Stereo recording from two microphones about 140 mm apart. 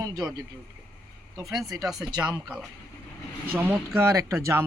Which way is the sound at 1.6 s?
25° right (ahead or behind).